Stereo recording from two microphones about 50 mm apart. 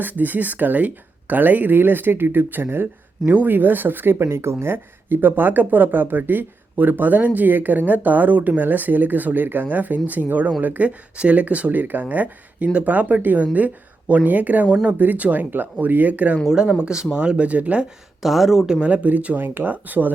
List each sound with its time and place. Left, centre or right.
0.0 s speech: right
4.6 s speech: right
16.7 s speech: centre
18.2 s speech: centre
18.6 s speech: centre
18.9 s speech: right
19.4 s speech: right